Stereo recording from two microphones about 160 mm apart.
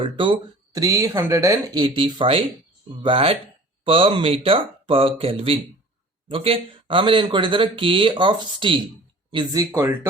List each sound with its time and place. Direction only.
0.0 s speech: 30° right (ahead or behind)